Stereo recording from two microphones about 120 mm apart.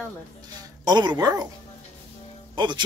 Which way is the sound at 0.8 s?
35° right (ahead or behind).